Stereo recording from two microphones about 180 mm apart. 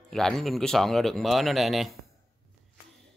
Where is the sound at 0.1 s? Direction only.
Centre (ahead or behind).